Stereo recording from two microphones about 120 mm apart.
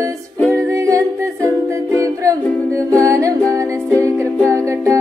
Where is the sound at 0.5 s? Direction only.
25° right (ahead or behind).